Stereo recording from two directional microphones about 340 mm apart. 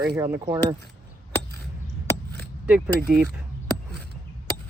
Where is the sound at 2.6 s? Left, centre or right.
Centre.